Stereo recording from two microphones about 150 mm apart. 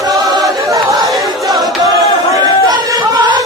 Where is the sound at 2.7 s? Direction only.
25° right (ahead or behind).